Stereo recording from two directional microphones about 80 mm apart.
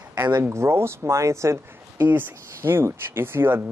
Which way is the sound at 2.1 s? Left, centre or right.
Right.